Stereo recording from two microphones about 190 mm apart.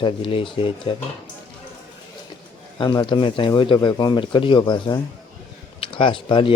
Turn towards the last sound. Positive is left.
turn(degrees=25)  # may be behind; listen again after turning